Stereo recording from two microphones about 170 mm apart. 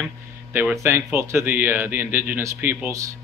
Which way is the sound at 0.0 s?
10° right (ahead or behind).